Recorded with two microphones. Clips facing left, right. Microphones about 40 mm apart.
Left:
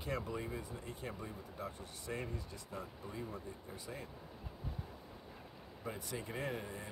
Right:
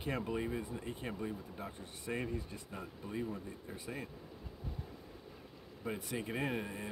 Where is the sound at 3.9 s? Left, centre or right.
Right.